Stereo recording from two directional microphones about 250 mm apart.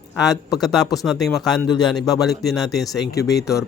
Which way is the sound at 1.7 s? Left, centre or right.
Centre.